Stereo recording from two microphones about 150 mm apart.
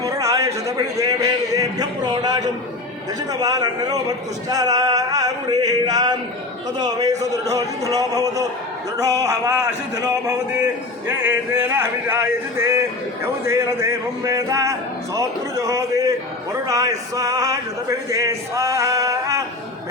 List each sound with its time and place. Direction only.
0.0 s a sound: 20° right (ahead or behind)
0.9 s speech: 20° right (ahead or behind)
4.4 s music: 25° right (ahead or behind)
6.7 s speech: 25° right (ahead or behind)